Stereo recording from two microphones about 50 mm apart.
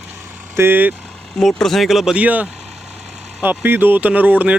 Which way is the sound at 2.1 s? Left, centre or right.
Right.